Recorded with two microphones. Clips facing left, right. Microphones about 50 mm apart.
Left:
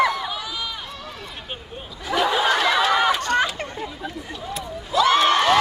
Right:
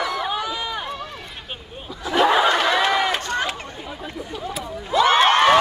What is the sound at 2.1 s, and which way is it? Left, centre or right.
Snicker, right.